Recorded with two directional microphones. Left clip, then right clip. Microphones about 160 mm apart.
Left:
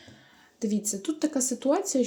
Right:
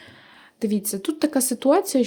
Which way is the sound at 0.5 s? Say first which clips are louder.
Right 5 dB; 35° right (ahead or behind).